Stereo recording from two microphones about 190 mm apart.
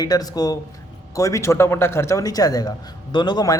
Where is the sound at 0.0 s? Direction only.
20° left (ahead or behind).